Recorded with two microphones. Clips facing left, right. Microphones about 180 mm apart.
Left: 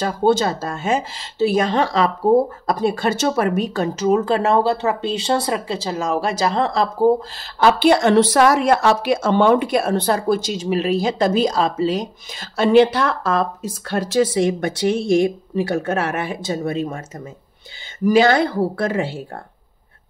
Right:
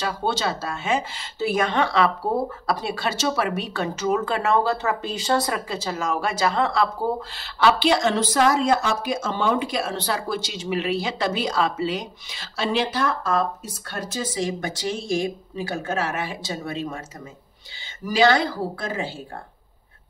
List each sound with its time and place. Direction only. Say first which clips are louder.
0.0 s speech: left 8 dB; 45° left (ahead or behind)
18.0 s speech: left 5 dB; 50° left (ahead or behind)